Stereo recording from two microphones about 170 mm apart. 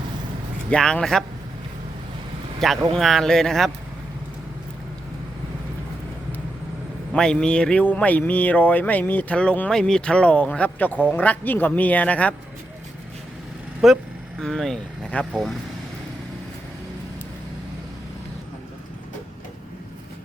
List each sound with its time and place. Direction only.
0.7 s speech: 5° left (ahead or behind)
2.9 s speech: centre (ahead or behind)
7.1 s speech: 5° left (ahead or behind)
13.8 s speech: centre (ahead or behind)